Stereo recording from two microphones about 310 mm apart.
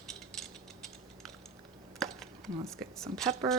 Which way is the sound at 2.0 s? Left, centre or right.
Centre.